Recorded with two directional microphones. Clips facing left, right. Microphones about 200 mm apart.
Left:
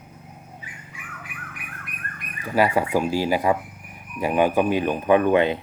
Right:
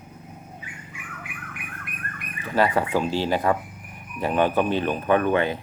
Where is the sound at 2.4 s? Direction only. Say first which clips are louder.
Left 1 dB; 10° left (ahead or behind).